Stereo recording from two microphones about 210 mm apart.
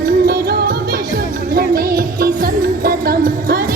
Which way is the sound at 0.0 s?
45° right (ahead or behind).